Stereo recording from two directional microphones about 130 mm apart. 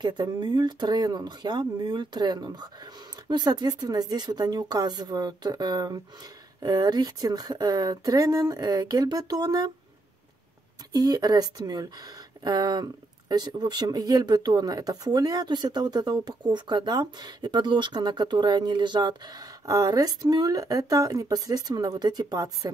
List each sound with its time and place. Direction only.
0.0 s speech: 35° right (ahead or behind)
10.9 s speech: 30° right (ahead or behind)